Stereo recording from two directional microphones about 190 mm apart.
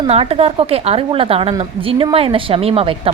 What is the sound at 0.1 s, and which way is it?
A woman's voice, 30° right (ahead or behind).